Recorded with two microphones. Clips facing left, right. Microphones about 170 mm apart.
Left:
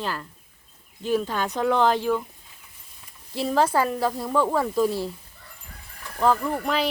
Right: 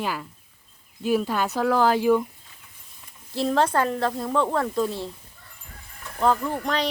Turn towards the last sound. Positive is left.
turn(degrees=5)  # may be behind; listen again after turning